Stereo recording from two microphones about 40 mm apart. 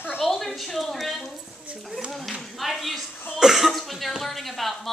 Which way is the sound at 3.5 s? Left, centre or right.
Centre.